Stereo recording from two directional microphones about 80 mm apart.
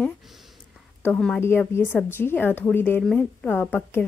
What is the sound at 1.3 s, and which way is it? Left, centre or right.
A woman's voice, left.